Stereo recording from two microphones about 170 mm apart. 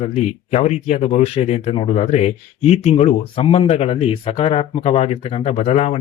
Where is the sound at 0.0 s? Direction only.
40° left (ahead or behind).